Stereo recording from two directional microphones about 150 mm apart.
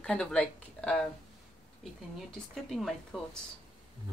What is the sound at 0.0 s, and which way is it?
Speech, 5° left (ahead or behind).